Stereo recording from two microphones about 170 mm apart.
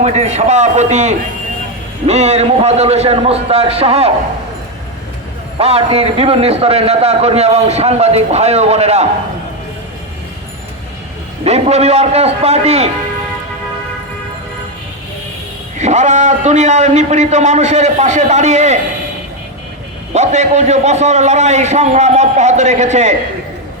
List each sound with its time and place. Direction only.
0.0 s a man's voice: 40° right (ahead or behind)
5.5 s a man's voice: 35° right (ahead or behind)
11.4 s a man's voice: 40° right (ahead or behind)
15.8 s a man's voice: 45° right (ahead or behind)
20.1 s a man's voice: 40° right (ahead or behind)